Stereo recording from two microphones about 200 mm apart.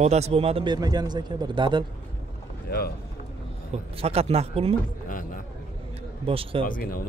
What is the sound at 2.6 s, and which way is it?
Speech, 50° left (ahead or behind).